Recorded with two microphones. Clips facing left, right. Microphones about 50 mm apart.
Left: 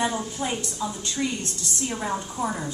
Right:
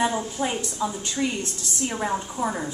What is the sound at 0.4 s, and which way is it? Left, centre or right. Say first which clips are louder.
A woman's voice: right 2 dB; centre.